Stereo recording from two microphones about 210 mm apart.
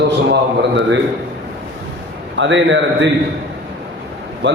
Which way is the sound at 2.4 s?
60° right (ahead or behind).